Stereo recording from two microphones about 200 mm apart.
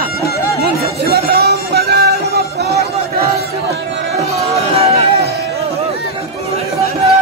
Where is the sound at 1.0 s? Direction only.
50° right (ahead or behind).